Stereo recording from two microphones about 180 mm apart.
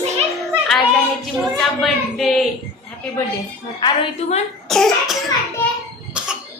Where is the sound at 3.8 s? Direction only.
30° left (ahead or behind).